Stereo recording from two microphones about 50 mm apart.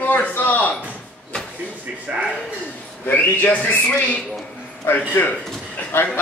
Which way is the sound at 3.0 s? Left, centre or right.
Left.